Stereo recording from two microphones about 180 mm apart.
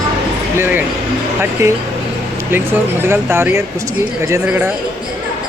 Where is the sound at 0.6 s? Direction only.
10° right (ahead or behind).